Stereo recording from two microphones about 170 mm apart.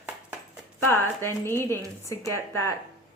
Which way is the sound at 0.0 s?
10° right (ahead or behind).